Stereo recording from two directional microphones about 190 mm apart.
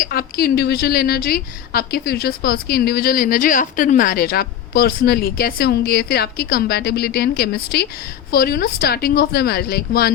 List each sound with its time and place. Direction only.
0.0 s a woman's voice: 50° left (ahead or behind)